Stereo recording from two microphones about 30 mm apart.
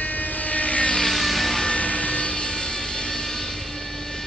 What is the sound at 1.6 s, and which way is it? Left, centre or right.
Vehicle, left.